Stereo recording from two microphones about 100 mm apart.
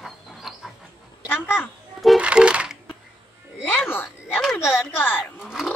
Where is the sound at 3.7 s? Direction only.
20° left (ahead or behind).